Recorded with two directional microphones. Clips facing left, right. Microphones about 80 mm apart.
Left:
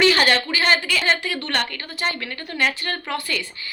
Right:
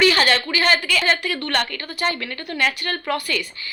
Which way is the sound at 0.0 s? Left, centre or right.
Left.